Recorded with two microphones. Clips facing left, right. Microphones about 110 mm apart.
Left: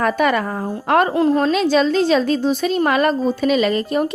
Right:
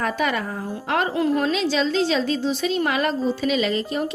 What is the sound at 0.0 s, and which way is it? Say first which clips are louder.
A woman's voice: left 6 dB; 55° left (ahead or behind).